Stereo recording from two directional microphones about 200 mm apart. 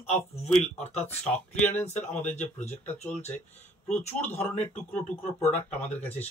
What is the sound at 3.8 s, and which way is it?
Speech, 35° left (ahead or behind).